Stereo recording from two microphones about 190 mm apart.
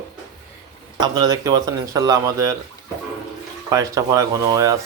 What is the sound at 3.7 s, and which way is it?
Speech, 20° right (ahead or behind).